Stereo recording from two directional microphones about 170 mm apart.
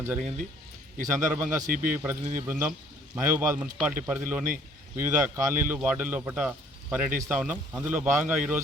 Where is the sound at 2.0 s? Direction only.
15° right (ahead or behind).